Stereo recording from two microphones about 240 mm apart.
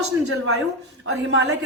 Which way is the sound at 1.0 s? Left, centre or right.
Right.